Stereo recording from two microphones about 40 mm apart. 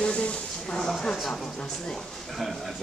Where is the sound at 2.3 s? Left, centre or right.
Centre.